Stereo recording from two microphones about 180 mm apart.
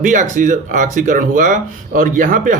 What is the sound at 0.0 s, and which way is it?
A man's voice, 45° right (ahead or behind).